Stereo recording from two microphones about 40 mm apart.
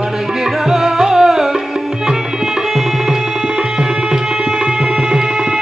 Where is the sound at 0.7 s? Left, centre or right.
Centre.